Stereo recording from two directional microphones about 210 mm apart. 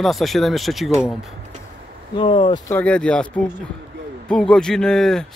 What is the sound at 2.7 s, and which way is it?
Speech, 5° left (ahead or behind).